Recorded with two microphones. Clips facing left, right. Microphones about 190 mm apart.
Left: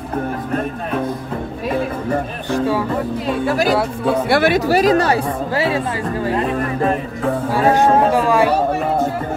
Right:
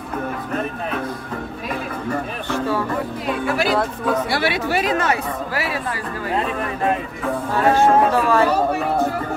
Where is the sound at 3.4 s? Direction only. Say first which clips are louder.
Left 3 dB; 40° left (ahead or behind); by 6.3 s 25° left (ahead or behind).